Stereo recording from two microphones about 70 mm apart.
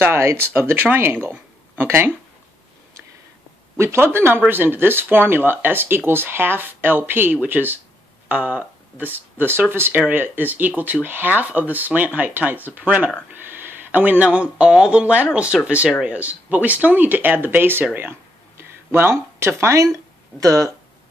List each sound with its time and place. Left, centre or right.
0.0 s speech: right
3.7 s speech: right